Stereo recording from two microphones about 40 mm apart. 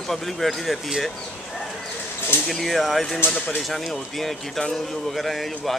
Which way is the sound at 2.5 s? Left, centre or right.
Centre.